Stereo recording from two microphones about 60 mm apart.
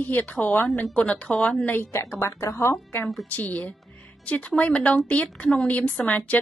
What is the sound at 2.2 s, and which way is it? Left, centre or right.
Speech, left.